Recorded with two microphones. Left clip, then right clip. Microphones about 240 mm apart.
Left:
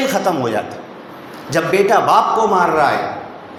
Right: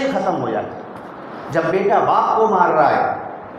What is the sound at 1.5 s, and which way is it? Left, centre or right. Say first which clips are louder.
A man's voice: left 3 dB; left.